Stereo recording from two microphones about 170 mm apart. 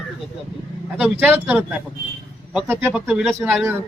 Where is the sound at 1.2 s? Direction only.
10° right (ahead or behind).